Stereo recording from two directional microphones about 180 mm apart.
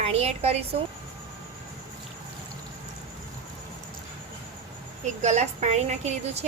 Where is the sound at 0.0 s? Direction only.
35° right (ahead or behind).